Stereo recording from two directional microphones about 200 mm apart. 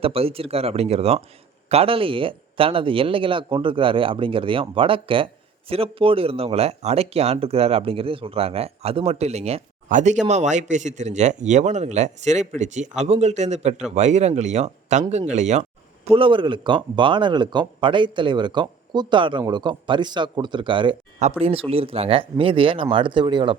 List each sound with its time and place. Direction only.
0.0 s speech: 30° right (ahead or behind)